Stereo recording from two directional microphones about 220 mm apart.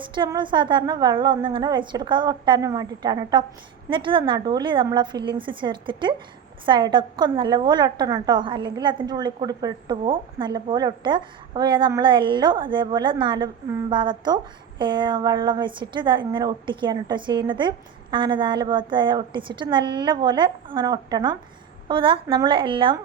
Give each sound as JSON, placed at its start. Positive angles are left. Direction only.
{"t": 0.1, "sound": "a woman's voice", "side_deg": -20}